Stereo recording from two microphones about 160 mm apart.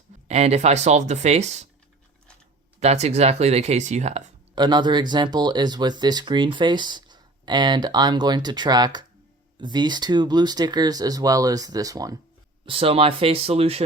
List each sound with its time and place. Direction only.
0.3 s speech: 40° right (ahead or behind)
2.8 s speech: 45° right (ahead or behind)
4.5 s speech: 25° right (ahead or behind)
12.6 s speech: 35° right (ahead or behind)